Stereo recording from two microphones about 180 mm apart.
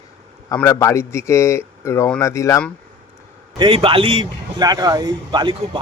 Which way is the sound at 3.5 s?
30° right (ahead or behind).